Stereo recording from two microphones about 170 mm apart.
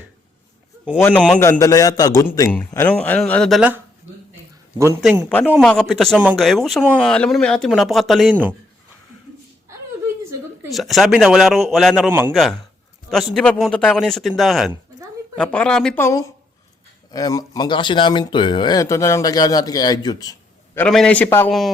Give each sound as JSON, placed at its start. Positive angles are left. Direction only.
{"t": 0.9, "sound": "speech", "side_deg": 10}
{"t": 1.4, "sound": "speech", "side_deg": 15}
{"t": 4.9, "sound": "speech", "side_deg": -5}
{"t": 10.7, "sound": "speech", "side_deg": 0}
{"t": 12.3, "sound": "speech", "side_deg": 0}
{"t": 16.0, "sound": "speech", "side_deg": 20}
{"t": 20.7, "sound": "speech", "side_deg": 5}